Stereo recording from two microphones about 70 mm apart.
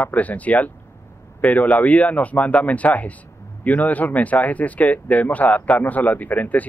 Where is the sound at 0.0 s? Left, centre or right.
Left.